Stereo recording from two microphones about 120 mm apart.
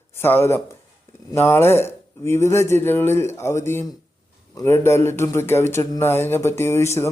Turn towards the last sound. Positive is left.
turn(degrees=20)  # may be behind; listen again after turning